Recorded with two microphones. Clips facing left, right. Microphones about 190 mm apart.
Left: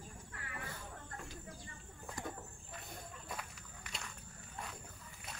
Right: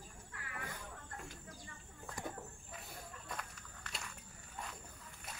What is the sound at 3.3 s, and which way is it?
Walk, 5° left (ahead or behind).